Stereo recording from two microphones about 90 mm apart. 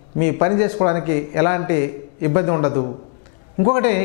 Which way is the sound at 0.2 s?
15° left (ahead or behind).